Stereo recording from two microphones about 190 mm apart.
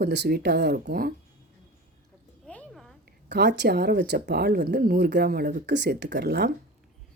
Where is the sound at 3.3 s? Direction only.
60° right (ahead or behind).